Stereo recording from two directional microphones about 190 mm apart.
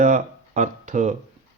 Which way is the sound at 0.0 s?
40° right (ahead or behind).